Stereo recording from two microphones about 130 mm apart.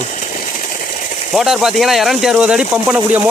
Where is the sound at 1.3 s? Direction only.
5° right (ahead or behind).